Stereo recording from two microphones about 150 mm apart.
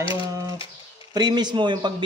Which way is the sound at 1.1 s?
30° right (ahead or behind).